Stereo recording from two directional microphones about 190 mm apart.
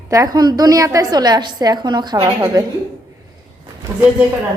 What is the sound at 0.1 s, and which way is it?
A woman's voice, 20° right (ahead or behind).